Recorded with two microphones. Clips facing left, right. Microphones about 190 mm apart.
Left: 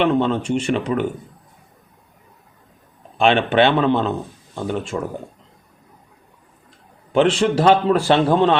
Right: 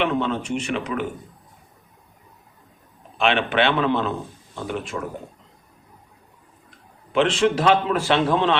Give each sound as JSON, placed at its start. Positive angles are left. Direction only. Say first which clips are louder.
{"t": 0.0, "sound": "a man's voice", "louder": "left 5 dB", "side_deg": 30}
{"t": 3.2, "sound": "a man's voice", "louder": "left 5 dB", "side_deg": 35}
{"t": 3.8, "sound": "a man's voice", "louder": "left 4 dB", "side_deg": 25}
{"t": 4.9, "sound": "a man's voice", "louder": "left 4 dB", "side_deg": 35}
{"t": 7.1, "sound": "a man's voice", "louder": "left 3 dB", "side_deg": 40}